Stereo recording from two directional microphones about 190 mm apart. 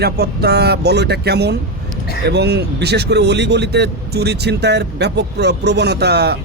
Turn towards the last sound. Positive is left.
turn(degrees=-60)  # may be behind; listen again after turning